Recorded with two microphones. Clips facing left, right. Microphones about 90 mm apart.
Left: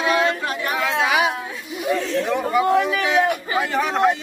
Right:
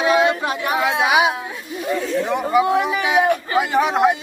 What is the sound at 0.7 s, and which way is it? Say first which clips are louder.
Speech: right 3 dB; 15° right (ahead or behind).